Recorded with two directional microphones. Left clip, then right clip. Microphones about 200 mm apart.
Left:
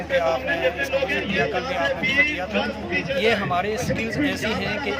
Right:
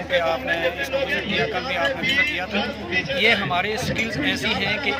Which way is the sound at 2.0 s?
50° left (ahead or behind).